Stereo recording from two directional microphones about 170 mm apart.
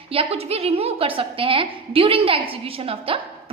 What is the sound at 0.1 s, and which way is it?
A woman's voice, 35° right (ahead or behind).